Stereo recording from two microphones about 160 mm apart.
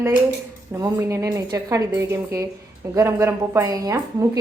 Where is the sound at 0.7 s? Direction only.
20° right (ahead or behind).